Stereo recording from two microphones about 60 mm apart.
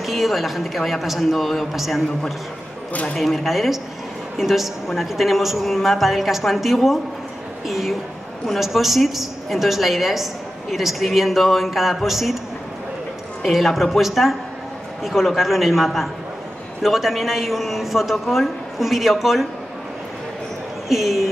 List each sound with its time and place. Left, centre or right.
0.0 s a woman's voice: centre
2.9 s speech: left
3.2 s a woman's voice: centre
13.4 s a woman's voice: centre
20.9 s a woman's voice: centre